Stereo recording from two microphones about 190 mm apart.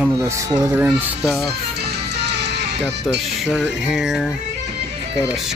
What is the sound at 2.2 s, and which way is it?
Music, 60° right (ahead or behind).